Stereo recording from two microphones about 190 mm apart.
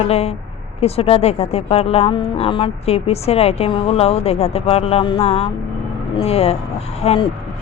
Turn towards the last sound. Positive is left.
turn(degrees=30)  # may be behind; listen again after turning